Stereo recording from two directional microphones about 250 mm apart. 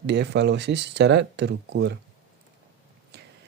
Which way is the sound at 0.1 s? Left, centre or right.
Right.